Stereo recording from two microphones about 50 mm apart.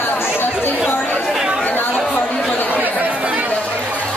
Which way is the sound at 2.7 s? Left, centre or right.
Right.